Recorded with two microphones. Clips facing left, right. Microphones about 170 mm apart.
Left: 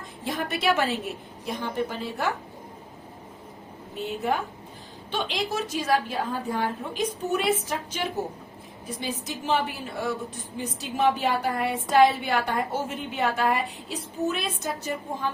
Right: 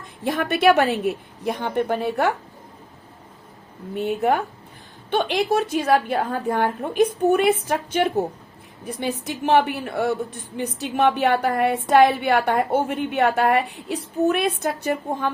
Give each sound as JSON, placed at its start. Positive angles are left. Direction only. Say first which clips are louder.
{"t": 0.3, "sound": "a woman's voice", "louder": "right 8 dB", "side_deg": -60}
{"t": 3.9, "sound": "a woman's voice", "louder": "right 7 dB", "side_deg": -60}